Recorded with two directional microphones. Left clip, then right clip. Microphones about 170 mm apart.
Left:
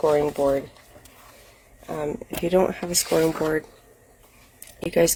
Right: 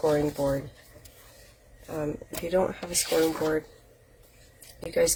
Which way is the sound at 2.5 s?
55° left (ahead or behind).